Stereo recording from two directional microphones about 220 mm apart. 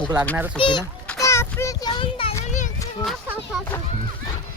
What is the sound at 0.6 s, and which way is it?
A child's voice, 20° left (ahead or behind).